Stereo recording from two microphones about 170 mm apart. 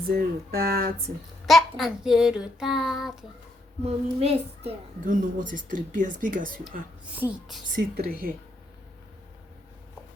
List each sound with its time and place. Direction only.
0.1 s speech: 65° right (ahead or behind)
1.5 s child singing: centre (ahead or behind)
3.8 s a child's voice: 35° right (ahead or behind)
5.0 s speech: 50° right (ahead or behind)
6.7 s child singing: 10° right (ahead or behind)
7.8 s speech: 60° right (ahead or behind)